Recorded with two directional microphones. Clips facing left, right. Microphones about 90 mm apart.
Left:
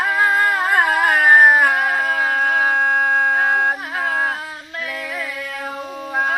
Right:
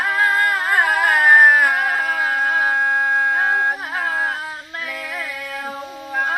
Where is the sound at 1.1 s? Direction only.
15° left (ahead or behind).